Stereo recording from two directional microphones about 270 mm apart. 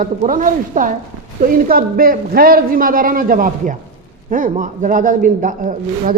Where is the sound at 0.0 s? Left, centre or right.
Right.